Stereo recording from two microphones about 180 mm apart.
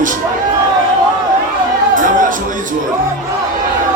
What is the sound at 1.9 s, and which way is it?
Speech, 45° right (ahead or behind).